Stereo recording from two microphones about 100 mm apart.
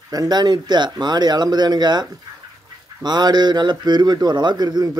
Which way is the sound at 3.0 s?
45° right (ahead or behind).